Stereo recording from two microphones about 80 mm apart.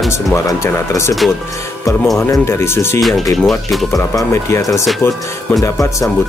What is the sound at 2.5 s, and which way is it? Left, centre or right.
Speech, left.